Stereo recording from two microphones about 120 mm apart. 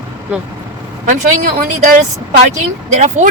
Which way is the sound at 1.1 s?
90° right.